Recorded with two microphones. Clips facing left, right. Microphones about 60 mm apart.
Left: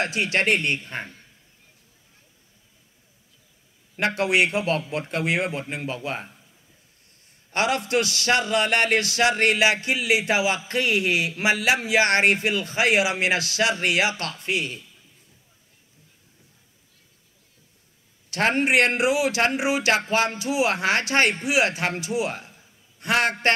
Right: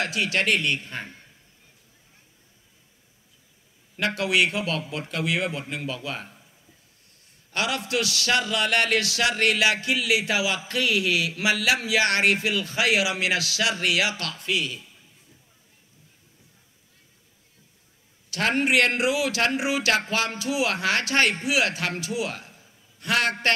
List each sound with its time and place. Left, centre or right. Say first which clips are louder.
0.0 s speech: left 2 dB; left
4.0 s speech: left 2 dB; left
7.5 s speech: left 4 dB; left
18.3 s a man's voice: left 2 dB; left